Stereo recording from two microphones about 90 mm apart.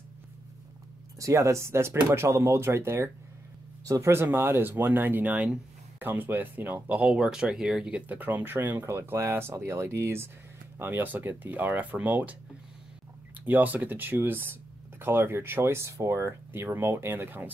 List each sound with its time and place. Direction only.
1.2 s speech: 35° right (ahead or behind); by 12.4 s 20° right (ahead or behind)
13.5 s speech: 20° right (ahead or behind)